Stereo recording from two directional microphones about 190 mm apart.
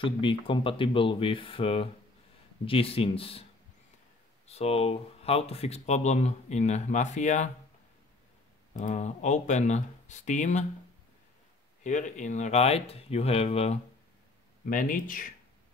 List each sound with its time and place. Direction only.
0.0 s speech: 25° left (ahead or behind)
4.5 s speech: 35° left (ahead or behind)
8.7 s speech: 40° left (ahead or behind)
11.8 s speech: 40° left (ahead or behind)
14.7 s speech: 45° left (ahead or behind)